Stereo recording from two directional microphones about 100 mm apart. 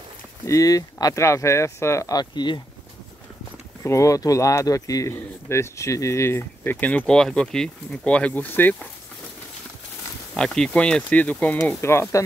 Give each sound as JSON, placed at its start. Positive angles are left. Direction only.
{"t": 0.5, "sound": "speech", "side_deg": 35}
{"t": 3.8, "sound": "speech", "side_deg": 30}
{"t": 10.3, "sound": "speech", "side_deg": 5}
{"t": 11.8, "sound": "speech", "side_deg": 25}